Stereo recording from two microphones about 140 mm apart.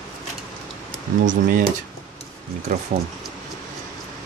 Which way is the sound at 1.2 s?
75° right (ahead or behind).